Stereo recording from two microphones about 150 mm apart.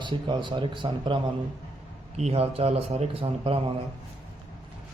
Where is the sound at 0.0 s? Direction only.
30° right (ahead or behind).